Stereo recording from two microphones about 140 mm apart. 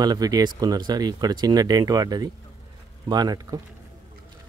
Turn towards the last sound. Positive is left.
turn(degrees=-30)  # may be behind; listen again after turning